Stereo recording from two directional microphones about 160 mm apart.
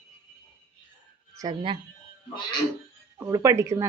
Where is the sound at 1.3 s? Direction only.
30° right (ahead or behind).